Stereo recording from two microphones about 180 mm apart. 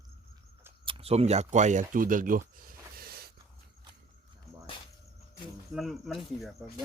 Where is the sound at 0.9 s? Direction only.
30° right (ahead or behind); by 3.3 s 60° right (ahead or behind).